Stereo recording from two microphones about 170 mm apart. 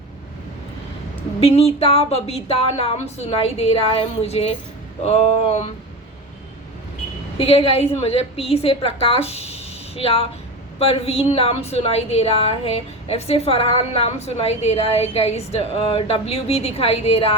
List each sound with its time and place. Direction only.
1.4 s a woman's voice: 35° left (ahead or behind)
7.3 s a woman's voice: 35° left (ahead or behind)